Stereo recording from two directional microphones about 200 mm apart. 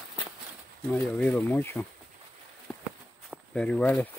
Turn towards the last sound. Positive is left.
turn(degrees=5)  # may be behind; listen again after turning